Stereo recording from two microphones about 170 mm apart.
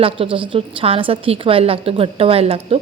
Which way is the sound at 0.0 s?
30° right (ahead or behind).